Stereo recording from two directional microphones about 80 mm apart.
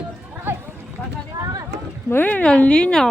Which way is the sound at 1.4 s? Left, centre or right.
Right.